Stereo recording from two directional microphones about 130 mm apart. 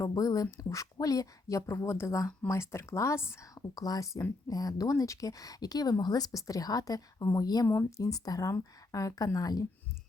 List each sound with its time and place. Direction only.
0.0 s speech: 30° left (ahead or behind)